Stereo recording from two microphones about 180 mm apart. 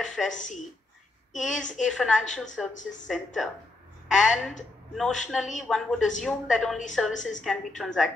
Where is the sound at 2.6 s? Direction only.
Centre (ahead or behind).